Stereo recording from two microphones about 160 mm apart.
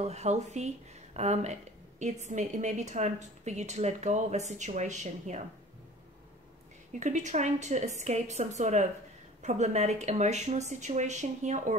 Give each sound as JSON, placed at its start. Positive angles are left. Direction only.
{"t": 0.0, "sound": "speech", "side_deg": -45}
{"t": 6.9, "sound": "speech", "side_deg": -50}